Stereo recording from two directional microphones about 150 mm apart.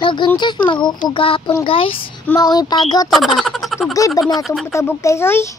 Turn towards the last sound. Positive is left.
turn(degrees=15)  # may be behind; listen again after turning